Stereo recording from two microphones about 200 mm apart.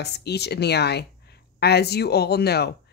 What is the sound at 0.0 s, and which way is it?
A woman's voice, 55° left (ahead or behind).